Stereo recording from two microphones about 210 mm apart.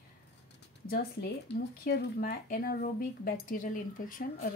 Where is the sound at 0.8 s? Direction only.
45° left (ahead or behind).